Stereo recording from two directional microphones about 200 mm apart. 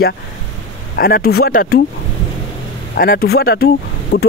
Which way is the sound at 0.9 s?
50° left (ahead or behind).